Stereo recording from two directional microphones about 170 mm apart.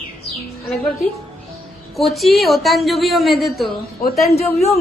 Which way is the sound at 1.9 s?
Centre (ahead or behind).